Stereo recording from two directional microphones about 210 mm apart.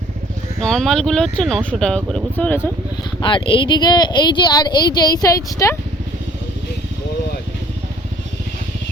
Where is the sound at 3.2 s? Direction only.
25° left (ahead or behind).